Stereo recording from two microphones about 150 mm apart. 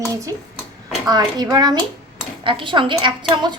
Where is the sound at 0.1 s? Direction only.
20° right (ahead or behind).